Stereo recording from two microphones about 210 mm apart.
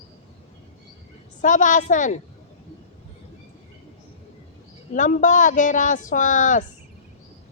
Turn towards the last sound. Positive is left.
turn(degrees=35)  # may be behind; listen again after turning